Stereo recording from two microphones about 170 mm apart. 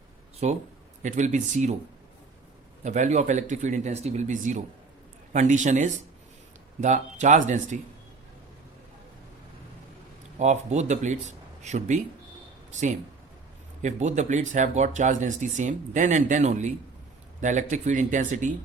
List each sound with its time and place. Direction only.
0.4 s speech: 45° right (ahead or behind)
2.8 s speech: 45° right (ahead or behind)
10.3 s speech: 45° right (ahead or behind)
13.8 s speech: 45° right (ahead or behind)